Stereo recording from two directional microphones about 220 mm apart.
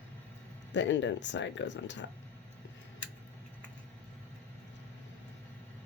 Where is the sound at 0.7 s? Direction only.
55° left (ahead or behind).